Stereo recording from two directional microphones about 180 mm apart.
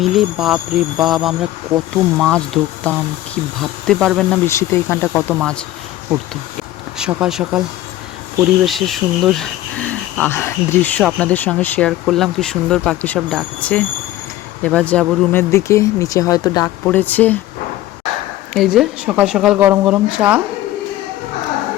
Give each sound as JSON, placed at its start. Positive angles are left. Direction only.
{"t": 0.0, "sound": "speech", "side_deg": 0}
{"t": 4.4, "sound": "speech", "side_deg": 15}
{"t": 7.0, "sound": "speech", "side_deg": -5}
{"t": 8.6, "sound": "speech", "side_deg": 0}
{"t": 16.8, "sound": "speech", "side_deg": 10}
{"t": 18.5, "sound": "speech", "side_deg": -5}